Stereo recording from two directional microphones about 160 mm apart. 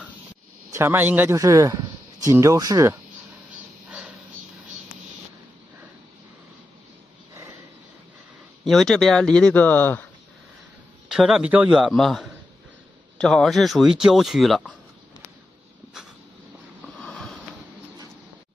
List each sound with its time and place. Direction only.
0.7 s a man's voice: 15° right (ahead or behind)
8.6 s speech: centre (ahead or behind)
11.1 s speech: 5° right (ahead or behind)
17.0 s a sound: 5° left (ahead or behind)